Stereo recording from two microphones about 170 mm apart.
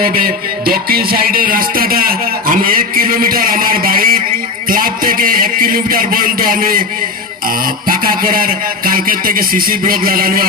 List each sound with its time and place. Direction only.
0.6 s speech: 60° right (ahead or behind)
7.9 s speech: 55° right (ahead or behind)